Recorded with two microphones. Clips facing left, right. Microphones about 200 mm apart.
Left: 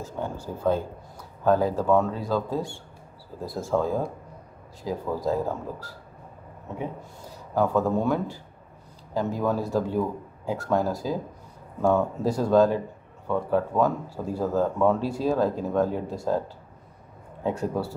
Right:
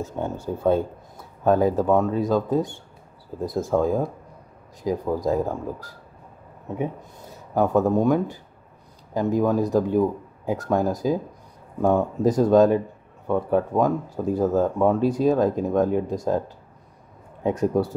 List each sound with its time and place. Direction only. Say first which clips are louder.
0.2 s speech: right 3 dB; 20° right (ahead or behind)
1.4 s speech: right 3 dB; 20° right (ahead or behind)
7.5 s speech: right 3 dB; 20° right (ahead or behind)